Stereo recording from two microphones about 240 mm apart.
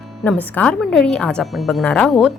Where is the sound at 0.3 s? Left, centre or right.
Centre.